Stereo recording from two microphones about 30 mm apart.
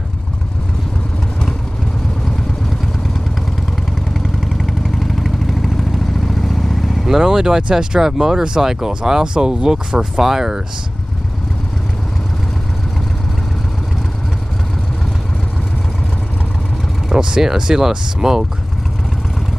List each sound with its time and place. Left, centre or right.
4.9 s vehicle: centre
7.1 s speech: centre
10.2 s speech: centre
17.1 s speech: right